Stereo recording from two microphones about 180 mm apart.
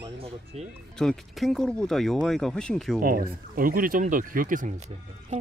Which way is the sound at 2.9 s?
55° right (ahead or behind).